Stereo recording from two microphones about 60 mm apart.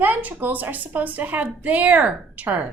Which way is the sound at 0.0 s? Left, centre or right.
Right.